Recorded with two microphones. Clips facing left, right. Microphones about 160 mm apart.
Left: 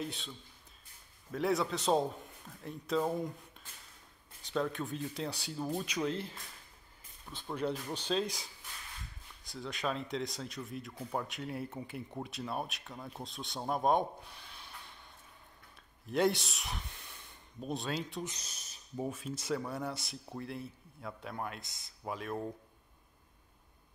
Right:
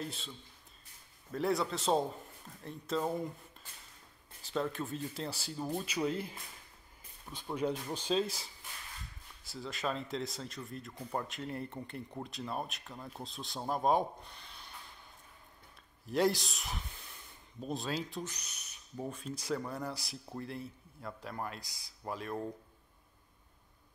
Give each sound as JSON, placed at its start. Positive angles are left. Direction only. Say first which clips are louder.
{"t": 1.3, "sound": "speech", "louder": "left 1 dB", "side_deg": 0}
{"t": 16.1, "sound": "speech", "louder": "even", "side_deg": 0}
{"t": 18.2, "sound": "speech", "louder": "left 1 dB", "side_deg": 25}
{"t": 19.0, "sound": "speech", "louder": "even", "side_deg": 5}